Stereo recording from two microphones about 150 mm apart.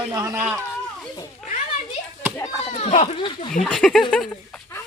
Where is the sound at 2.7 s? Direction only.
45° left (ahead or behind).